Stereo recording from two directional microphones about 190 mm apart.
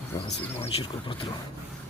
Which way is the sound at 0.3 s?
30° left (ahead or behind).